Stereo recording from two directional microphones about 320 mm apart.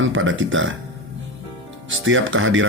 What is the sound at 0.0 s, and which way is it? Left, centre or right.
Speech, right.